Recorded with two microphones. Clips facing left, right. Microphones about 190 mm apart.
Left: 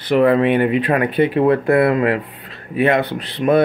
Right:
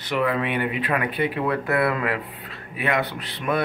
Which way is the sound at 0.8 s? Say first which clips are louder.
Left 8 dB; 40° left (ahead or behind).